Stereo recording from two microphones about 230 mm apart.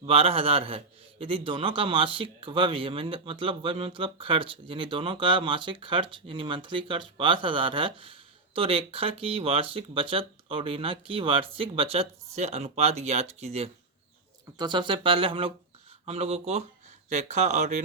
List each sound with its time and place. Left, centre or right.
0.0 s speech: right